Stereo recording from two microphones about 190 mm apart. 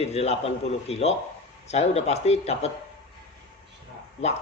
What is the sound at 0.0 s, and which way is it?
A man's voice, 35° left (ahead or behind).